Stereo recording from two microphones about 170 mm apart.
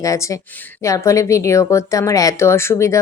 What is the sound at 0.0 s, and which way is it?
A woman's voice, 20° left (ahead or behind).